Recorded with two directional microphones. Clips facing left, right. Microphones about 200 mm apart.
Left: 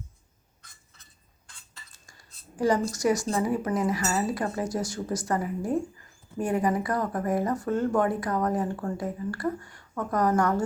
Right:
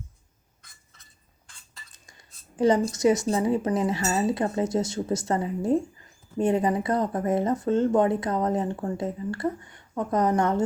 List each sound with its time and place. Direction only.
1.9 s speech: 20° right (ahead or behind)